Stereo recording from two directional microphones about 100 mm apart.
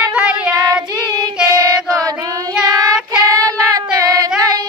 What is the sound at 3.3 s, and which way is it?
Child singing, 35° right (ahead or behind).